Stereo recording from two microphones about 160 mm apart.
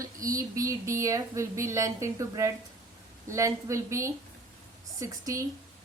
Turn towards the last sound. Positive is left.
turn(degrees=-20)  # may be behind; listen again after turning